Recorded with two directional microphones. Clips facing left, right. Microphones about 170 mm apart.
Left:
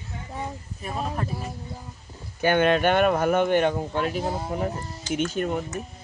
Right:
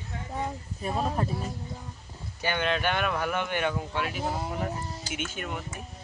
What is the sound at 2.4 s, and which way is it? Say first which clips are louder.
Speech: left 8 dB; 50° left (ahead or behind).